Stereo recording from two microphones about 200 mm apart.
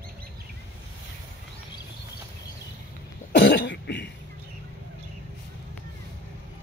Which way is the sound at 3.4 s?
60° left (ahead or behind).